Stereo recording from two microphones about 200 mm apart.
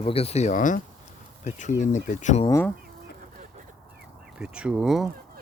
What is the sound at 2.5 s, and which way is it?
Speech, 10° left (ahead or behind).